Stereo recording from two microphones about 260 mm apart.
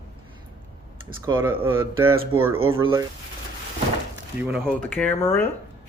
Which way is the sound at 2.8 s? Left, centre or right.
Centre.